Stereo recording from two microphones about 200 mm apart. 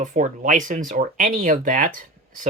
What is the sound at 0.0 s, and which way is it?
Speech, 40° right (ahead or behind).